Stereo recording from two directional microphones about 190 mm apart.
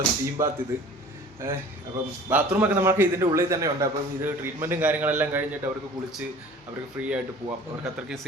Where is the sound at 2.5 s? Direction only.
10° right (ahead or behind).